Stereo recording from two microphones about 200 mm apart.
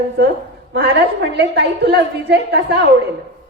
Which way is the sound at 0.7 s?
60° right (ahead or behind).